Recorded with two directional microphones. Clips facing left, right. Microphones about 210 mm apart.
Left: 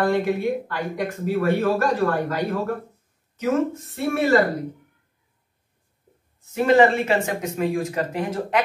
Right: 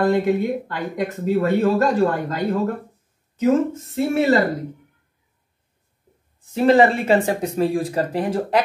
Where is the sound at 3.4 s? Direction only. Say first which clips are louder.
Right 4 dB; 25° right (ahead or behind).